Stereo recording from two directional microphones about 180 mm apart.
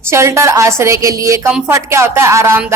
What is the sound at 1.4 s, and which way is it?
Speech, 5° right (ahead or behind).